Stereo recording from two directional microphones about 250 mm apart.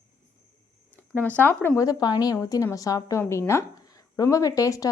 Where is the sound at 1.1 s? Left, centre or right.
Centre.